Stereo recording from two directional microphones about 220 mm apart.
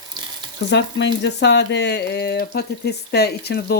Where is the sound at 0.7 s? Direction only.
50° left (ahead or behind).